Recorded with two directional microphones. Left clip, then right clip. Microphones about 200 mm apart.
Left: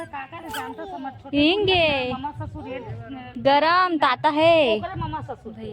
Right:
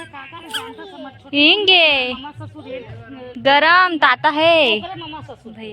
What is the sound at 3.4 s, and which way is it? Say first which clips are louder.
Speech: right 6 dB; centre (ahead or behind).